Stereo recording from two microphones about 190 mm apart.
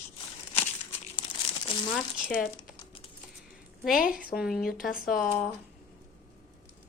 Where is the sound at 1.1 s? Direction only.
30° left (ahead or behind).